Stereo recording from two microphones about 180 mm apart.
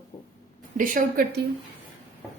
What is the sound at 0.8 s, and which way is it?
Speech, 50° right (ahead or behind).